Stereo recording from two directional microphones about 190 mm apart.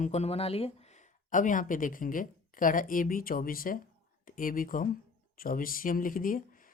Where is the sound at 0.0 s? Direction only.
35° left (ahead or behind).